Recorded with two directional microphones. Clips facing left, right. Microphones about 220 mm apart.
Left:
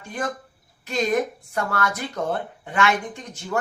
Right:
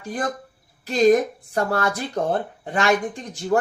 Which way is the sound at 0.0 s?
35° right (ahead or behind).